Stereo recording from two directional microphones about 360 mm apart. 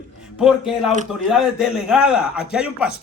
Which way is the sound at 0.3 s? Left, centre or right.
Centre.